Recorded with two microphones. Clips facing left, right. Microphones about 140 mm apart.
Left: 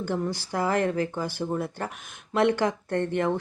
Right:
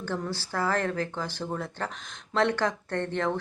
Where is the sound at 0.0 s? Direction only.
15° left (ahead or behind).